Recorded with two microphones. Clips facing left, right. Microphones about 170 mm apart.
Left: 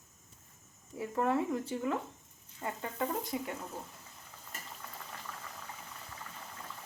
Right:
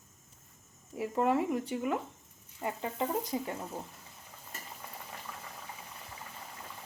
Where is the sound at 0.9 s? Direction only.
20° right (ahead or behind).